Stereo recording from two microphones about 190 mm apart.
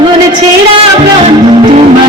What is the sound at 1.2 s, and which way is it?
Music, 30° right (ahead or behind).